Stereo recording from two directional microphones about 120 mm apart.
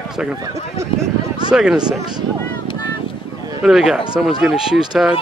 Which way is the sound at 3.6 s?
5° right (ahead or behind).